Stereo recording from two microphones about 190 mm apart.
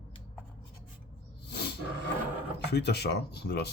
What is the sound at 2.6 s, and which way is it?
Speech, 60° left (ahead or behind).